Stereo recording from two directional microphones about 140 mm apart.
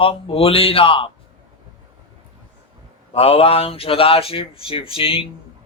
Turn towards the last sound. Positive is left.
turn(degrees=40)  # may be behind; listen again after turning